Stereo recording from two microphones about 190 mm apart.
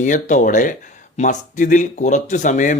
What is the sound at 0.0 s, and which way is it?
Speech, 40° left (ahead or behind).